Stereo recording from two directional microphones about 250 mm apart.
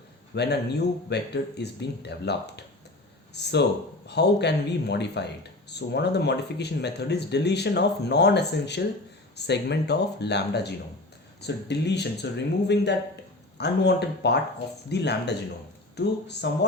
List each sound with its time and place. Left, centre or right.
0.3 s speech: left